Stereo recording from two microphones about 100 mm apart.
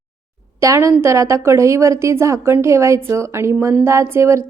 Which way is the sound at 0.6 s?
30° right (ahead or behind).